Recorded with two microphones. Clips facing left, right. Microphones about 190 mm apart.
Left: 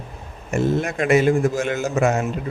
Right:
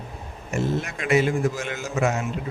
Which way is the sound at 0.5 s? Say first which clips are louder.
Left 5 dB; 50° left (ahead or behind).